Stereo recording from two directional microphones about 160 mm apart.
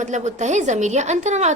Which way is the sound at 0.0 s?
45° right (ahead or behind).